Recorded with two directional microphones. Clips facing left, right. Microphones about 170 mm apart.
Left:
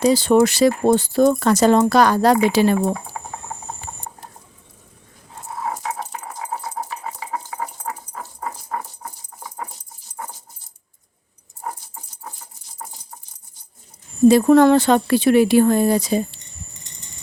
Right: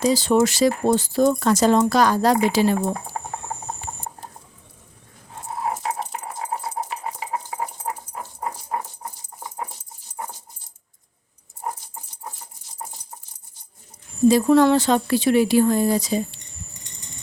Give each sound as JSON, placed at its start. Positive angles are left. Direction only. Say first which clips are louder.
{"t": 0.0, "sound": "speech", "louder": "left 3 dB", "side_deg": 60}
{"t": 5.5, "sound": "dog", "louder": "right 1 dB", "side_deg": -25}
{"t": 14.3, "sound": "speech", "louder": "left 3 dB", "side_deg": 60}